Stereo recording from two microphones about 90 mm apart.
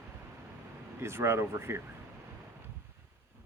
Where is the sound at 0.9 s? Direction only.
30° right (ahead or behind).